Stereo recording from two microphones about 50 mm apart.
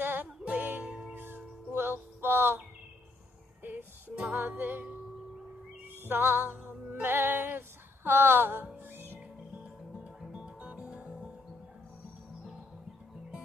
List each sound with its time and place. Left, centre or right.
0.0 s music: right
0.8 s music: right
1.1 s music: right
4.1 s music: right
4.4 s music: right
6.0 s music: right
9.6 s music: right